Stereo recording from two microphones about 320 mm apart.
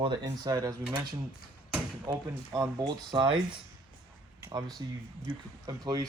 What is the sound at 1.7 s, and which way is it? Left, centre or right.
Speech, centre.